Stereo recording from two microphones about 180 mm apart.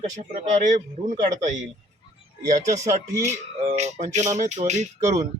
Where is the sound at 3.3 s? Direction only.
40° right (ahead or behind).